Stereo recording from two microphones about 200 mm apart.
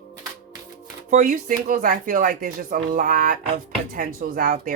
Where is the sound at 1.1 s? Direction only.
40° right (ahead or behind).